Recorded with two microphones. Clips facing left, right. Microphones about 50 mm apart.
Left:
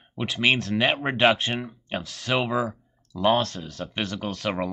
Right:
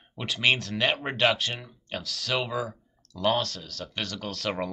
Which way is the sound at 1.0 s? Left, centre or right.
Left.